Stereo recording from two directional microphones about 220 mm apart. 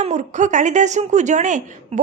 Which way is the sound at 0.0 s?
35° right (ahead or behind).